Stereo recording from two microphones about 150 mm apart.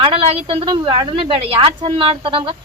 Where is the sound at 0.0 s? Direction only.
40° right (ahead or behind).